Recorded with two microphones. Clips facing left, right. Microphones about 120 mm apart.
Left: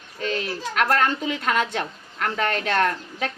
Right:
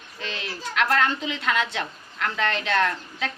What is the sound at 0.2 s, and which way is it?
A woman's voice, 45° left (ahead or behind).